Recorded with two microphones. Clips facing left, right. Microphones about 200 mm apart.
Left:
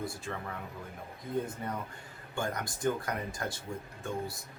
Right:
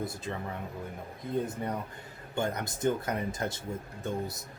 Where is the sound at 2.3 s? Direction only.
20° right (ahead or behind).